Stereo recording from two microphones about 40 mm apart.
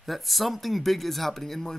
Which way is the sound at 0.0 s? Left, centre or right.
Centre.